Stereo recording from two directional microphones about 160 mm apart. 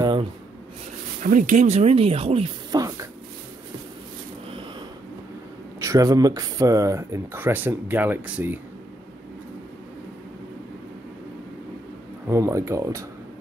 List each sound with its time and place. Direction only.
0.0 s writing: 30° right (ahead or behind)
1.2 s speech: 55° right (ahead or behind)
2.7 s a sound: 20° right (ahead or behind)
5.8 s speech: 20° right (ahead or behind)
12.3 s speech: 20° right (ahead or behind)